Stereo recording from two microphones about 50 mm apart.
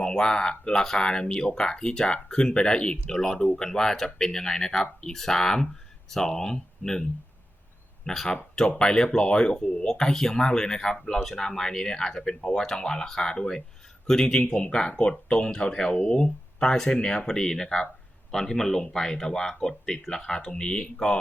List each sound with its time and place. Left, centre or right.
0.0 s speech: centre